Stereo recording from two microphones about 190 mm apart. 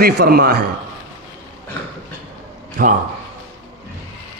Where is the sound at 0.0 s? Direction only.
55° right (ahead or behind).